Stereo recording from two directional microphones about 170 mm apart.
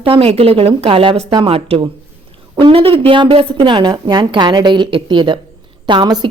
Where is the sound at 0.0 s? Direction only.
35° right (ahead or behind).